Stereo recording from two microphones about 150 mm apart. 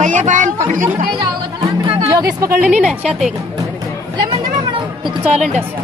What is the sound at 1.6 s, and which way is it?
Music, 25° right (ahead or behind).